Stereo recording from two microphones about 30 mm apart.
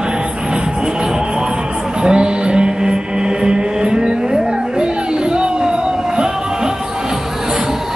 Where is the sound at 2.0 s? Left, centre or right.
Right.